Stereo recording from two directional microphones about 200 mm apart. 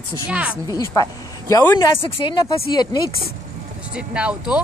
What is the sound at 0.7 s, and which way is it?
Speech, 20° left (ahead or behind).